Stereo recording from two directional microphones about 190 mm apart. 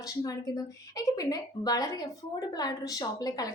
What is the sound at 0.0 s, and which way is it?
A woman's voice, 20° left (ahead or behind).